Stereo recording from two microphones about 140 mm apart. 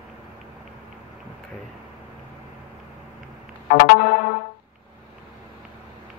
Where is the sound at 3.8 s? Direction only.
90° left.